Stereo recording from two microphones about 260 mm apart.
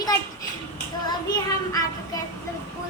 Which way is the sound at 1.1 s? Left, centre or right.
Centre.